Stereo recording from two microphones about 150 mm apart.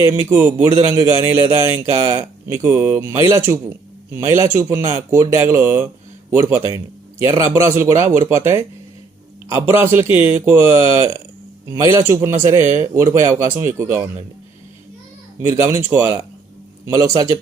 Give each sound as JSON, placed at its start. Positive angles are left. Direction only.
{"t": 0.0, "sound": "a man's voice", "side_deg": -15}
{"t": 15.4, "sound": "a man's voice", "side_deg": -15}